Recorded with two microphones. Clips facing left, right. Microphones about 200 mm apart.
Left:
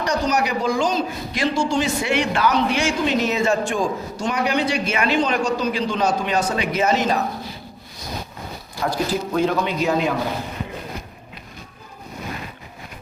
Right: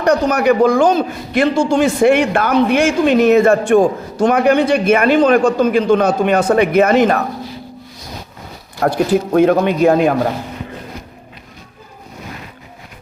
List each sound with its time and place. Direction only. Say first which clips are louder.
0.0 s a man's voice: right 8 dB; 55° right (ahead or behind)
8.8 s a man's voice: right 8 dB; 55° right (ahead or behind)